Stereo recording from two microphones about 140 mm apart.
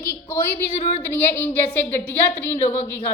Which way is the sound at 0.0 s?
15° left (ahead or behind).